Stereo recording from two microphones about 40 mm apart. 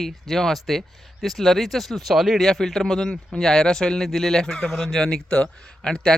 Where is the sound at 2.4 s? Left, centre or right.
Centre.